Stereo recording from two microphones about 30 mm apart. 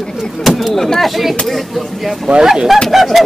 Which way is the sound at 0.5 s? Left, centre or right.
Centre.